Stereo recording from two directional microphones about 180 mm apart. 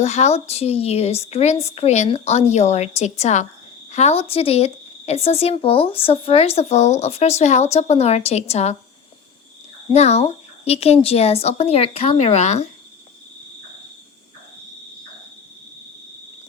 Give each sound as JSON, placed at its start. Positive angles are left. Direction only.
{"t": 0.0, "sound": "speech", "side_deg": 40}
{"t": 9.9, "sound": "speech", "side_deg": 35}